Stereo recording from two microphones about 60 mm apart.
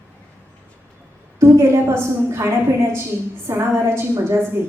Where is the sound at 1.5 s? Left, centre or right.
Right.